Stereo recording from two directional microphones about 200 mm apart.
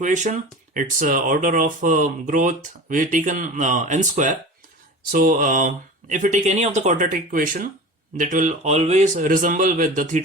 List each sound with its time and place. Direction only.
0.0 s speech: 40° right (ahead or behind)